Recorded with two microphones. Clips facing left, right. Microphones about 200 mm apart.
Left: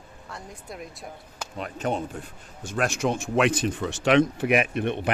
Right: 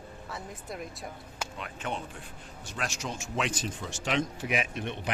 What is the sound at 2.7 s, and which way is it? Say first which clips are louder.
Speech: left 11 dB; 55° left (ahead or behind).